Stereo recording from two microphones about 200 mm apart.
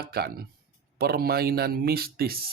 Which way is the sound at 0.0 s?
50° right (ahead or behind).